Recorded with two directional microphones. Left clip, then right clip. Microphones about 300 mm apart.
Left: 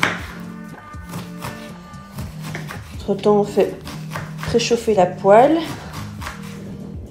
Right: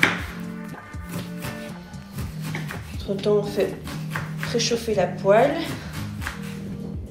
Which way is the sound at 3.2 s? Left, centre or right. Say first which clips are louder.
Left 6 dB; left.